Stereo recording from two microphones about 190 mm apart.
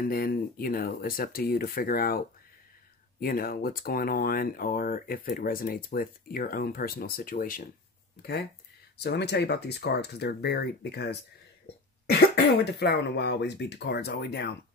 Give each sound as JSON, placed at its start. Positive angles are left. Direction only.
{"t": 0.0, "sound": "speech", "side_deg": 50}